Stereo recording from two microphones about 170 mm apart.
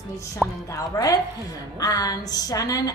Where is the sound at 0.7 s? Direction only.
20° left (ahead or behind).